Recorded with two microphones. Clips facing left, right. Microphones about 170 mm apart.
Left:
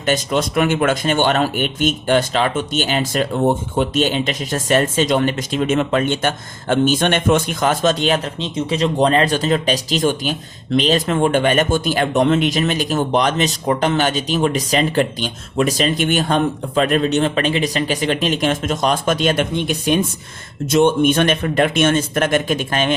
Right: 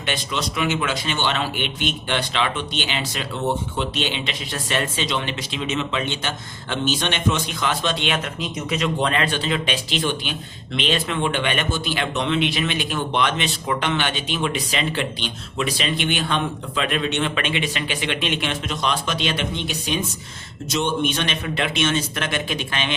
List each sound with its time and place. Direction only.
0.0 s speech: 45° left (ahead or behind)